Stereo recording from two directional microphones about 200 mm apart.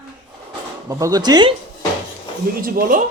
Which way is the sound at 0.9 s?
15° right (ahead or behind).